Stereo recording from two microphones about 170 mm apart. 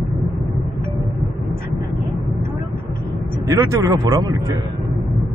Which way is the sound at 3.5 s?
20° right (ahead or behind).